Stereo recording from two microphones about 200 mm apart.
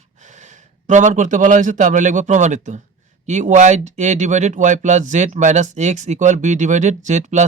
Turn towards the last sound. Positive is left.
turn(degrees=-35)  # may be behind; listen again after turning